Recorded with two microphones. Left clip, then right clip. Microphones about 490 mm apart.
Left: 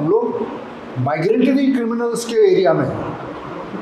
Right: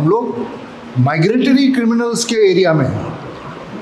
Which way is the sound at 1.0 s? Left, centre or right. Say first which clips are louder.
Right 2 dB; right.